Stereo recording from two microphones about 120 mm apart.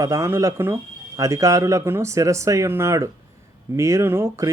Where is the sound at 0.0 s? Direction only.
25° right (ahead or behind).